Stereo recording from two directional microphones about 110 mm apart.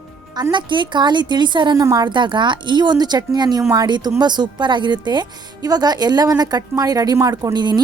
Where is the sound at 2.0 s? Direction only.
45° right (ahead or behind).